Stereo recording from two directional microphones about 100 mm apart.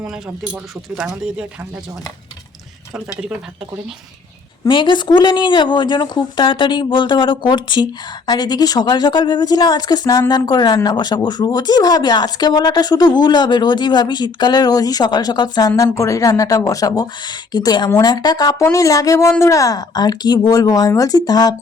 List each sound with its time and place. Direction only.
0.5 s speech: 5° right (ahead or behind)
2.9 s speech: 10° right (ahead or behind)
4.7 s speech: 50° left (ahead or behind)
8.3 s a woman's voice: 40° left (ahead or behind)